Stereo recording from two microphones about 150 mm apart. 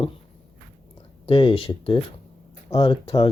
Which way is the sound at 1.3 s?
35° left (ahead or behind).